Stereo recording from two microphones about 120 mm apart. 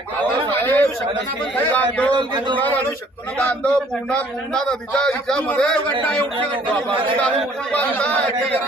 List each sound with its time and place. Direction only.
0.5 s a sound: 20° left (ahead or behind)
1.7 s a man's voice: 10° left (ahead or behind)
2.1 s a man's voice: 40° right (ahead or behind)
2.6 s a man's voice: 15° left (ahead or behind)
7.2 s a man's voice: 10° left (ahead or behind)